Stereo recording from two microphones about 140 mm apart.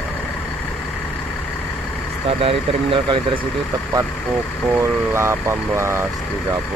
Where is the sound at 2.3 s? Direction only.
40° right (ahead or behind).